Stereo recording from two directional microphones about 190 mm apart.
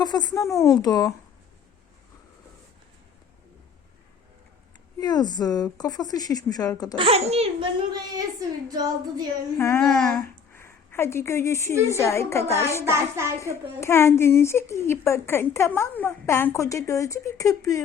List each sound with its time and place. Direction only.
0.0 s speech: 20° left (ahead or behind)
4.9 s speech: 20° left (ahead or behind)
6.9 s speech: 30° right (ahead or behind)
9.6 s a woman's voice: 15° left (ahead or behind)
10.2 s a sound: 15° left (ahead or behind)
11.9 s a woman's voice: 15° left (ahead or behind)
12.8 s a sound: 15° right (ahead or behind)
13.4 s a woman's voice: 15° left (ahead or behind)